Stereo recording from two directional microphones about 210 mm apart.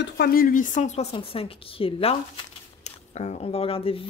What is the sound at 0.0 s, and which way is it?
A woman's voice, 45° left (ahead or behind).